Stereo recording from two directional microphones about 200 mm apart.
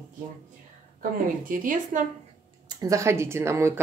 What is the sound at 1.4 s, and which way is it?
Speech, 45° right (ahead or behind).